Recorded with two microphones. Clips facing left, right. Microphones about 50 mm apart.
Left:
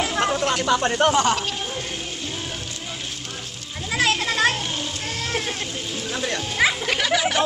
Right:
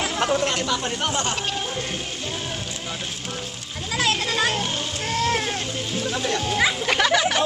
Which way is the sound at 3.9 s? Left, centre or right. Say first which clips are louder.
Left 2 dB; left.